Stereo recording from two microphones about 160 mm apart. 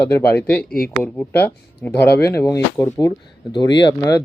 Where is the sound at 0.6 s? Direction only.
70° left (ahead or behind).